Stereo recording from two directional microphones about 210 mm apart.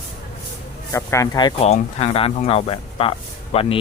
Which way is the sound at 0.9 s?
15° left (ahead or behind).